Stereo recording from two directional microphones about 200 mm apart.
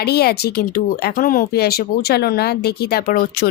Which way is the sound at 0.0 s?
55° left (ahead or behind).